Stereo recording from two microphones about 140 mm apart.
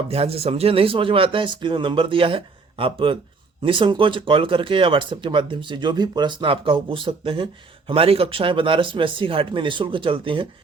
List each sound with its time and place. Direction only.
0.1 s speech: 45° right (ahead or behind)